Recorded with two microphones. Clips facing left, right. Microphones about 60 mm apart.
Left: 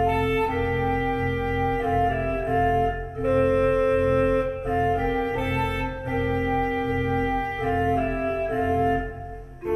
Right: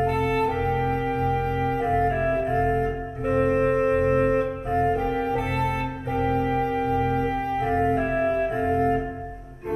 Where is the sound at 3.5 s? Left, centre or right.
Right.